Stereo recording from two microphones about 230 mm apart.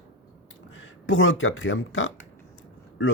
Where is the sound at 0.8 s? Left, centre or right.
Left.